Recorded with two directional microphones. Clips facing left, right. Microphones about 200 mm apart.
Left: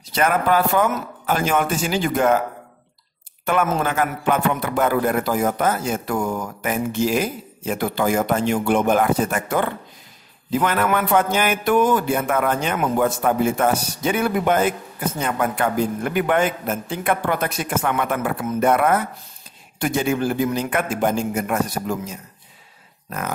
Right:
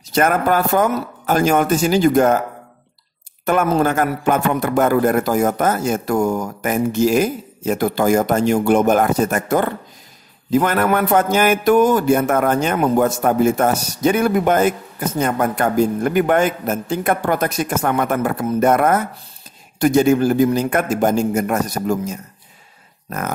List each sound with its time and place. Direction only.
0.1 s a man's voice: 45° right (ahead or behind)
3.4 s a man's voice: 40° right (ahead or behind)